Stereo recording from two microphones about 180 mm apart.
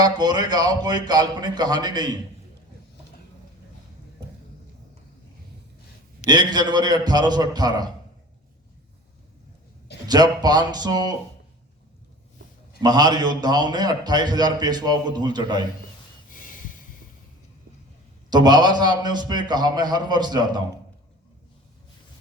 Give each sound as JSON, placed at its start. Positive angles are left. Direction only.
{"t": 0.0, "sound": "a man's voice", "side_deg": -20}
{"t": 6.2, "sound": "a man's voice", "side_deg": -25}
{"t": 10.1, "sound": "a man's voice", "side_deg": -20}
{"t": 12.8, "sound": "a man's voice", "side_deg": -25}
{"t": 16.3, "sound": "snort", "side_deg": 50}
{"t": 18.3, "sound": "a man's voice", "side_deg": -25}